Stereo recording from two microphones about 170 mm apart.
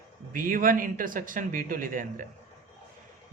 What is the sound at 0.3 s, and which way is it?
A man's voice, 55° right (ahead or behind).